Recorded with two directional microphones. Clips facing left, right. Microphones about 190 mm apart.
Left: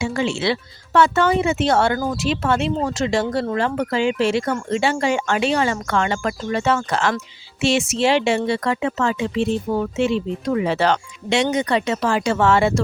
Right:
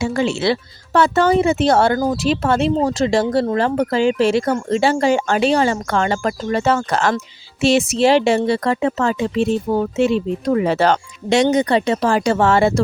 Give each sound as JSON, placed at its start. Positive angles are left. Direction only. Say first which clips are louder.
{"t": 0.0, "sound": "speech", "louder": "right 3 dB", "side_deg": -40}